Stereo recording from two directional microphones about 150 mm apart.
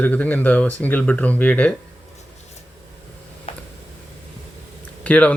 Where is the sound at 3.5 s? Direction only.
40° left (ahead or behind).